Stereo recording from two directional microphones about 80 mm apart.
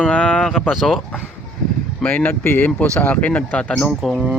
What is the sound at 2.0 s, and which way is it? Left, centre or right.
Speech, left.